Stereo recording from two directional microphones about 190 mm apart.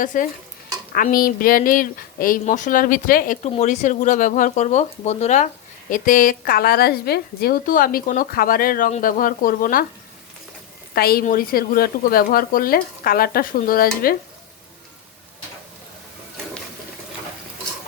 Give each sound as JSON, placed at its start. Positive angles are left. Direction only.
{"t": 0.0, "sound": "a woman's voice", "side_deg": 45}
{"t": 10.9, "sound": "a woman's voice", "side_deg": 55}